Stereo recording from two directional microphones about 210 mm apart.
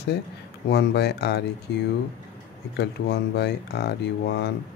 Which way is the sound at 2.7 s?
55° left (ahead or behind).